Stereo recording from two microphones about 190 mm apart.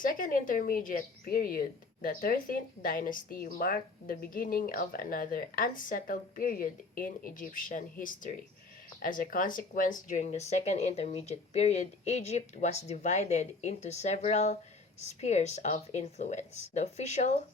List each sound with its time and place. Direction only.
0.0 s a woman's voice: 45° left (ahead or behind)